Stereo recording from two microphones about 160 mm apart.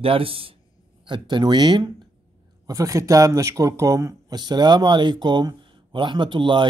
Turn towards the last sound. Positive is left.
turn(degrees=-30)  # may be behind; listen again after turning